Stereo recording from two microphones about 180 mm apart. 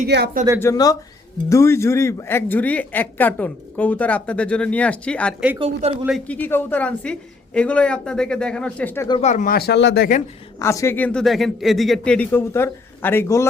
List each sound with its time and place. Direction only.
0.6 s speech: 20° left (ahead or behind)
5.5 s speech: 30° right (ahead or behind)
6.1 s speech: 5° left (ahead or behind)
9.2 s speech: 45° left (ahead or behind); by 10.1 s 70° left (ahead or behind)
10.6 s speech: 15° left (ahead or behind)